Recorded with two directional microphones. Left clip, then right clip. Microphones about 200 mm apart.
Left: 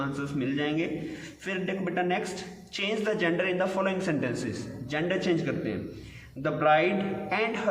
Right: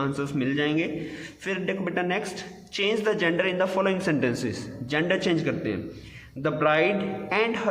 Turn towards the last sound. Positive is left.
turn(degrees=-40)  # may be behind; listen again after turning